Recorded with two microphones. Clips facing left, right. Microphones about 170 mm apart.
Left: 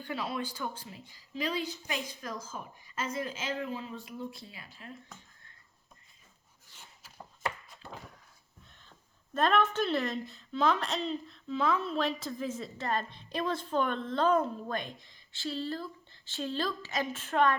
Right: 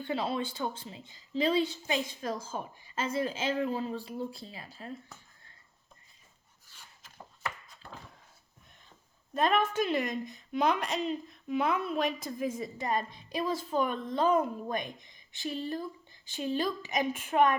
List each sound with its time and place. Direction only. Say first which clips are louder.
0.0 s a woman's voice: right 4 dB; 25° right (ahead or behind)
9.3 s a woman's voice: even; 10° right (ahead or behind)